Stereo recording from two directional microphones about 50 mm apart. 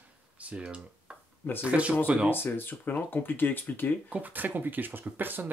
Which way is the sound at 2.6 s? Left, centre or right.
Left.